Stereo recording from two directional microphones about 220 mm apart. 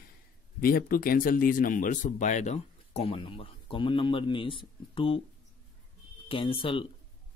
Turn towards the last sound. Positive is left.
turn(degrees=25)  # may be behind; listen again after turning